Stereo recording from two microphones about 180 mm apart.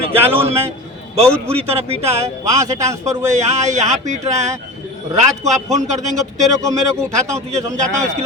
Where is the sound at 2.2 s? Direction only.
15° right (ahead or behind).